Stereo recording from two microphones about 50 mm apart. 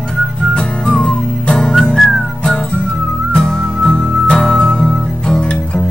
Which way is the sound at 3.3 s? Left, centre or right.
Centre.